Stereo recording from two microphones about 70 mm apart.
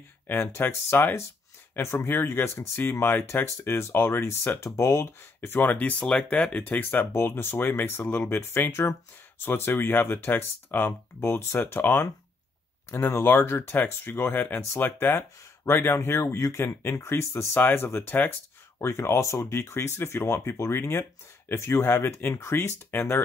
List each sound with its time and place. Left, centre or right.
0.3 s speech: left
5.8 s speech: centre
6.7 s speech: left
17.6 s speech: left
18.8 s speech: left